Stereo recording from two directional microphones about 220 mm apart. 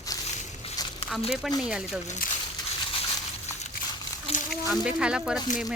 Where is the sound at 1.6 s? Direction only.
5° right (ahead or behind).